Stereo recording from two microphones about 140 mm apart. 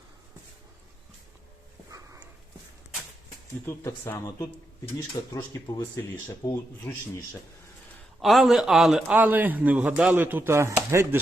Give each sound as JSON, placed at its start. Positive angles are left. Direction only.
{"t": 3.7, "sound": "speech", "side_deg": 15}
{"t": 6.8, "sound": "speech", "side_deg": 10}
{"t": 8.2, "sound": "a man's voice", "side_deg": 0}